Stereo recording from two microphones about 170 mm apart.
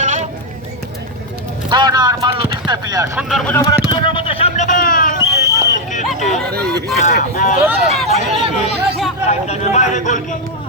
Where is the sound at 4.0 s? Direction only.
30° left (ahead or behind); by 5.2 s 50° left (ahead or behind).